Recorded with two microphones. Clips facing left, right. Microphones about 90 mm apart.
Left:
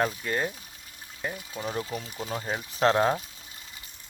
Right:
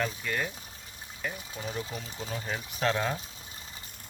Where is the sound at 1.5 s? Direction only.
35° left (ahead or behind).